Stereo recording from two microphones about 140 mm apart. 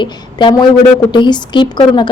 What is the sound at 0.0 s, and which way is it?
A woman's voice, 35° left (ahead or behind).